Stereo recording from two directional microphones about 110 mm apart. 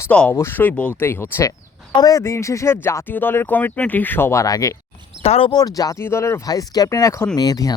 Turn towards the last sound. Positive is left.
turn(degrees=35)  # may be behind; listen again after turning